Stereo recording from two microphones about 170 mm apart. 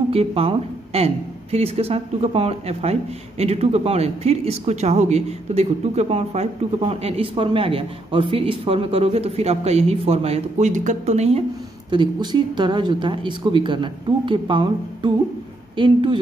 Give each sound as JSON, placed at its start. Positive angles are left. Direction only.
{"t": 0.1, "sound": "a woman's voice", "side_deg": -35}
{"t": 11.9, "sound": "speech", "side_deg": -25}